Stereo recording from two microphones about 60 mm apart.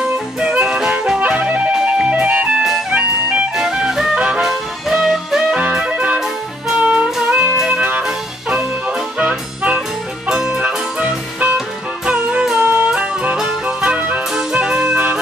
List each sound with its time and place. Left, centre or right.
0.4 s music: centre
3.5 s music: centre
9.3 s music: centre
10.6 s music: right
13.8 s music: right